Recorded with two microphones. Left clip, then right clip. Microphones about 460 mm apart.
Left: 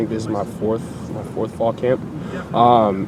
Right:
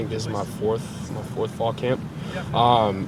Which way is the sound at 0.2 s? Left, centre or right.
Right.